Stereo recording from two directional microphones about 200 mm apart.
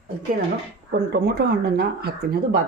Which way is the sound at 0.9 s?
50° right (ahead or behind).